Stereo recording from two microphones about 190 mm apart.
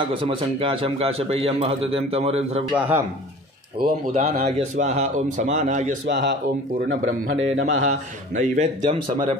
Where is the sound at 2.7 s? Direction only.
10° right (ahead or behind).